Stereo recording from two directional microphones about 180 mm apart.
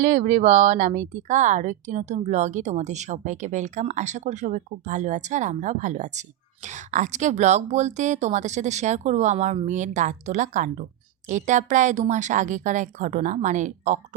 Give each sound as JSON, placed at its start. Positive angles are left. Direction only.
{"t": 0.0, "sound": "a woman's voice", "side_deg": -40}